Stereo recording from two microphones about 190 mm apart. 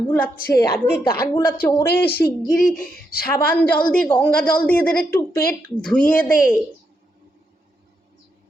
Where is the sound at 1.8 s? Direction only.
60° left (ahead or behind).